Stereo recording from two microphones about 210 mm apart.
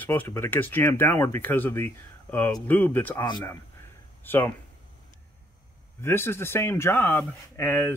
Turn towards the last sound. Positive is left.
turn(degrees=10)  # may be behind; listen again after turning